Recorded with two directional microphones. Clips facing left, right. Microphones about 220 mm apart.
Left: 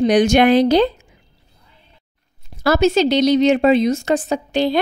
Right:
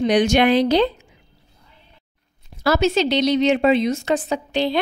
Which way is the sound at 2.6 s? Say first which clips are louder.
Left 3 dB; 50° left (ahead or behind).